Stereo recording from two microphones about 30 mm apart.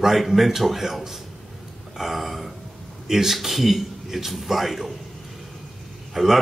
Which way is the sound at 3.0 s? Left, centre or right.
Centre.